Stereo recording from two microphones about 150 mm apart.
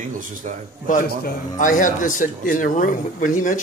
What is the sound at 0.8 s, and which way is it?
A man's voice, 70° left (ahead or behind).